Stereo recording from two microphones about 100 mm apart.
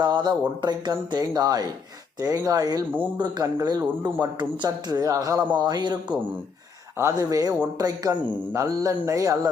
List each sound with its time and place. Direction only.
0.0 s a man's voice: 45° right (ahead or behind)
4.0 s a man's voice: 50° right (ahead or behind)